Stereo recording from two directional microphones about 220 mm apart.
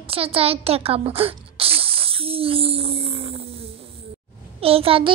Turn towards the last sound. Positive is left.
turn(degrees=-25)  # may be behind; listen again after turning